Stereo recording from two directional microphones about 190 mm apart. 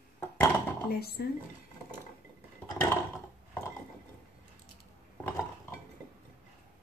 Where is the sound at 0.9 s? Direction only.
55° left (ahead or behind).